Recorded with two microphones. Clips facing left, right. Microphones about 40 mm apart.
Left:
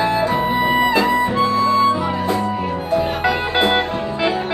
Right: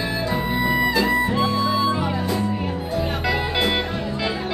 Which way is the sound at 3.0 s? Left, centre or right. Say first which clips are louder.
Left 4 dB; left.